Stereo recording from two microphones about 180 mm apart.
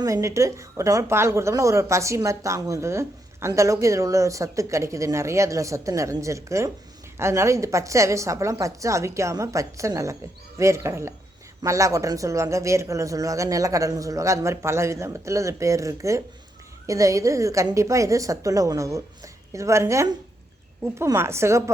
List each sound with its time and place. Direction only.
0.0 s a woman's voice: 15° right (ahead or behind)